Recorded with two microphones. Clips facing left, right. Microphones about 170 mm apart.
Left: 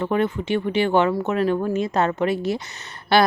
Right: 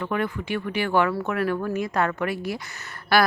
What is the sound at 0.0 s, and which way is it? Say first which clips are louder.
Speech: left 5 dB; 25° left (ahead or behind).